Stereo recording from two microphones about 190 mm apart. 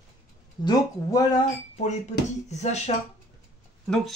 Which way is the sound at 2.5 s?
35° left (ahead or behind).